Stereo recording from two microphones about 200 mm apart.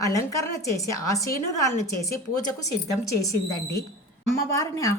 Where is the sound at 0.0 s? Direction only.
15° left (ahead or behind).